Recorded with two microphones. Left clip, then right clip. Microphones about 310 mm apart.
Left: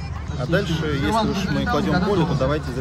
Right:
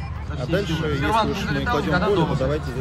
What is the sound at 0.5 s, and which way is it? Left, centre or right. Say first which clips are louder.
Speech: left 1 dB; centre.